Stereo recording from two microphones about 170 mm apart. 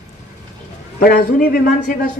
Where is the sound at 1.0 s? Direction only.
60° left (ahead or behind).